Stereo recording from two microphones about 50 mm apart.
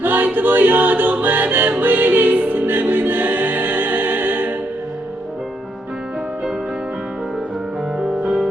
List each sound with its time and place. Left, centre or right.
0.0 s choir: right
1.8 s music: right
7.9 s music: centre